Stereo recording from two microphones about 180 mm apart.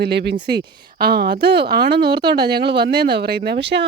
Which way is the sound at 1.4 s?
70° right (ahead or behind).